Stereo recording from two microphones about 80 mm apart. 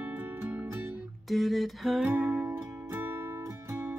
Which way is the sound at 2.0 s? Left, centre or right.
Right.